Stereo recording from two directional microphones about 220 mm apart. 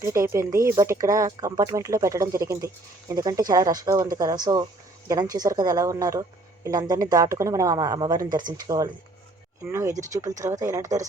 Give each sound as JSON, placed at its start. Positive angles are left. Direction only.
{"t": 0.0, "sound": "speech", "side_deg": -15}